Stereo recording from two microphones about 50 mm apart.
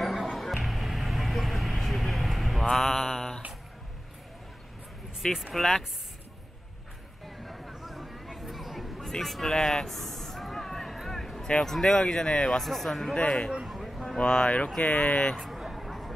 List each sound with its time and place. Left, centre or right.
0.0 s music: centre
0.7 s vehicle: centre
2.6 s mantra: centre
5.2 s speech: centre
7.2 s a sound: centre
11.6 s speech: centre
12.6 s speech: centre
13.7 s a sound: centre
14.1 s speech: centre
15.4 s a sound: centre